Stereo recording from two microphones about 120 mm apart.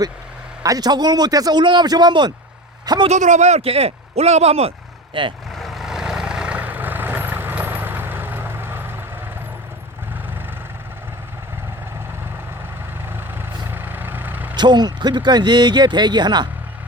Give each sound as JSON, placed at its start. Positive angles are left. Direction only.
{"t": 0.6, "sound": "speech", "side_deg": -30}
{"t": 3.1, "sound": "speech", "side_deg": -85}
{"t": 5.2, "sound": "speech", "side_deg": -45}
{"t": 5.5, "sound": "vehicle", "side_deg": 0}
{"t": 13.7, "sound": "vehicle", "side_deg": -15}
{"t": 14.5, "sound": "speech", "side_deg": -35}